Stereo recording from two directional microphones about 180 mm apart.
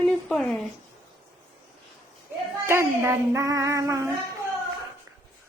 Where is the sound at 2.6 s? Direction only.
15° right (ahead or behind).